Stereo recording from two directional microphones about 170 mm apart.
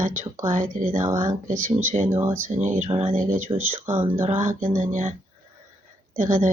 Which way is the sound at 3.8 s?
10° right (ahead or behind).